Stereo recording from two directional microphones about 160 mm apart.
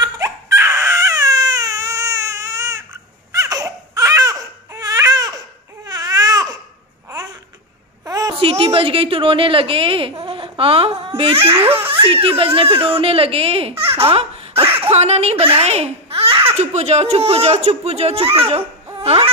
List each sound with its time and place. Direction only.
0.0 s baby cry: 20° right (ahead or behind)
8.0 s a sound: 25° right (ahead or behind)
8.5 s a woman's voice: 40° right (ahead or behind)
18.9 s baby cry: 35° right (ahead or behind)